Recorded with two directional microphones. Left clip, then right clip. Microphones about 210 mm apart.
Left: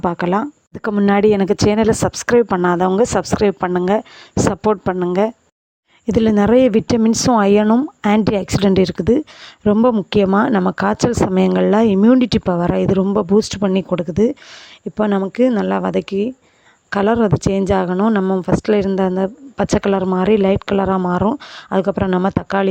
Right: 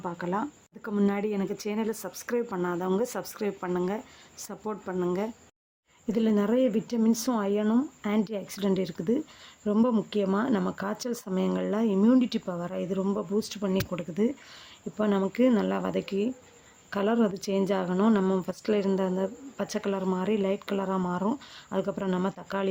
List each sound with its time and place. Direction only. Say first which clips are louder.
0.0 s speech: left 14 dB; 40° left (ahead or behind)
6.1 s speech: left 13 dB; 45° left (ahead or behind)